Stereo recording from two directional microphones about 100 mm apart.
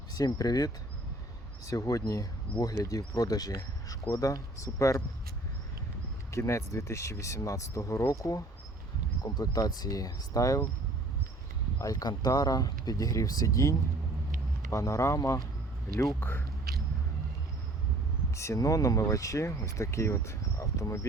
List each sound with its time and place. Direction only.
0.3 s speech: 40° left (ahead or behind)
6.3 s speech: 30° left (ahead or behind)
11.8 s speech: 40° left (ahead or behind); by 16.4 s 20° left (ahead or behind)
18.3 s speech: 30° left (ahead or behind)